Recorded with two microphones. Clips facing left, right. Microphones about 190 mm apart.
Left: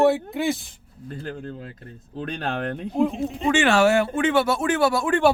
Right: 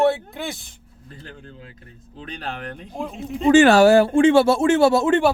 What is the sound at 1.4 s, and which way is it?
Speech, 45° left (ahead or behind).